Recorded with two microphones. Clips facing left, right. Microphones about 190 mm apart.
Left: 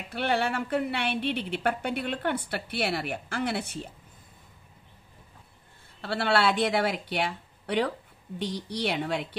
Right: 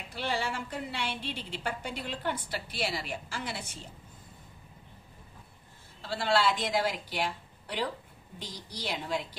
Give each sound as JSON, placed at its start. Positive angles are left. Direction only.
{"t": 0.1, "sound": "a woman's voice", "side_deg": 60}
{"t": 5.9, "sound": "a woman's voice", "side_deg": 65}